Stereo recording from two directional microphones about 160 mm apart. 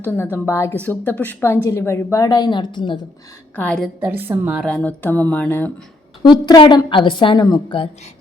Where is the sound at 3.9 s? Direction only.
10° right (ahead or behind).